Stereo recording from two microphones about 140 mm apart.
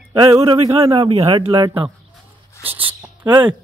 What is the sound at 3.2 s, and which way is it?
Speech, 30° right (ahead or behind).